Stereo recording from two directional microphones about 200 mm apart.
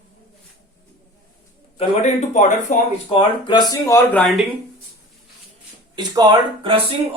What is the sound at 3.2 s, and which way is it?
Speech, 25° left (ahead or behind).